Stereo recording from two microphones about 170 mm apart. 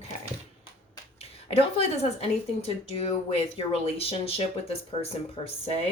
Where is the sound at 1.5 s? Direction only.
35° left (ahead or behind).